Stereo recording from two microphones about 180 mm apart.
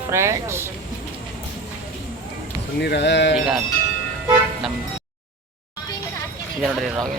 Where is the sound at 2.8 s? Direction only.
70° left (ahead or behind).